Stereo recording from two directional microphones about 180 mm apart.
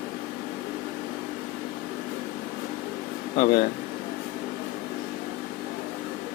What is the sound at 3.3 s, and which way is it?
Speech, 45° left (ahead or behind).